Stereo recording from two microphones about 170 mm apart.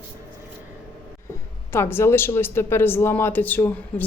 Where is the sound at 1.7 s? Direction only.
15° left (ahead or behind).